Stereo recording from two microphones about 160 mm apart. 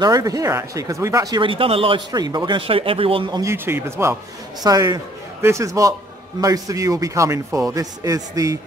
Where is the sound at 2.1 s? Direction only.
25° right (ahead or behind).